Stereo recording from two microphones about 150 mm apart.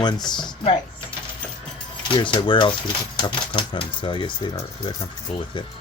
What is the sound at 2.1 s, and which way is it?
Speech, 30° left (ahead or behind).